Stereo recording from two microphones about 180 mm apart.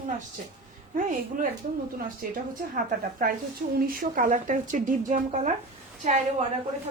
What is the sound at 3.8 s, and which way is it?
A woman's voice, 50° right (ahead or behind).